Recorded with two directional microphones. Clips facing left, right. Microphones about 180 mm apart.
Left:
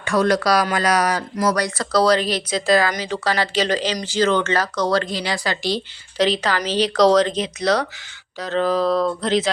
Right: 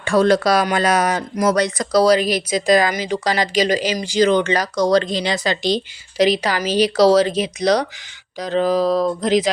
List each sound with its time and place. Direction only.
0.0 s speech: 30° right (ahead or behind)
1.9 s speech: 10° right (ahead or behind)